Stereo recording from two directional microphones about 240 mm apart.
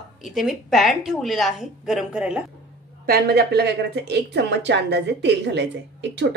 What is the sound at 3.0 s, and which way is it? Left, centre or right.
Speech, right.